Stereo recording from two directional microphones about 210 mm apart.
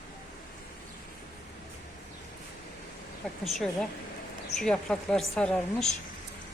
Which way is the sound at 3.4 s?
Centre (ahead or behind).